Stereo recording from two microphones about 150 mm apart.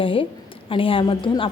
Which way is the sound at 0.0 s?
35° left (ahead or behind).